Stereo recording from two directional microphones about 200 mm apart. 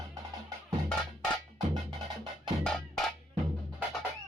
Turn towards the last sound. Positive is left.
turn(degrees=0)  # may be behind; listen again after turning